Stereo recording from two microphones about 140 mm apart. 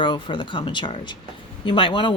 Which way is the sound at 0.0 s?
35° left (ahead or behind).